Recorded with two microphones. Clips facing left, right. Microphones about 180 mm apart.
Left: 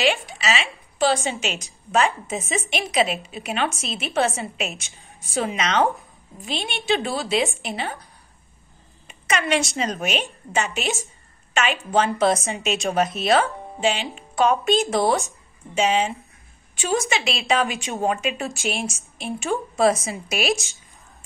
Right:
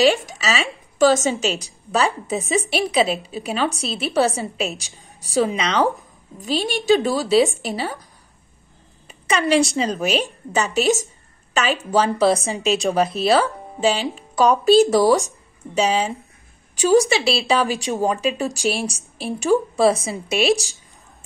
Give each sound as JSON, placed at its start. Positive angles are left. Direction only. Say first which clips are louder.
{"t": 0.0, "sound": "a woman's voice", "louder": "right 5 dB", "side_deg": -40}
{"t": 9.0, "sound": "a sound", "louder": "right 4 dB", "side_deg": -35}
{"t": 9.8, "sound": "a woman's voice", "louder": "right 4 dB", "side_deg": -35}